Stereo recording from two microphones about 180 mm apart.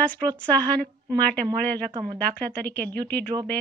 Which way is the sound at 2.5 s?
10° left (ahead or behind).